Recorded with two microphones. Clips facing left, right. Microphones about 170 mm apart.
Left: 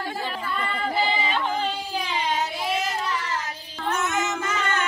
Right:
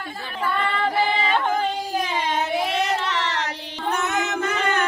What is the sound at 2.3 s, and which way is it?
Child singing, 65° right (ahead or behind).